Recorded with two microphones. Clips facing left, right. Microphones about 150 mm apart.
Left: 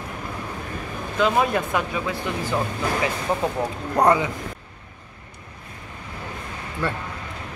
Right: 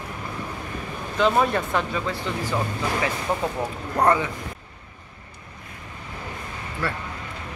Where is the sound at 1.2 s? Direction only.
5° left (ahead or behind).